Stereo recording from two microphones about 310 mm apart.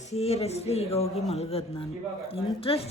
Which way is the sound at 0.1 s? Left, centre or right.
Centre.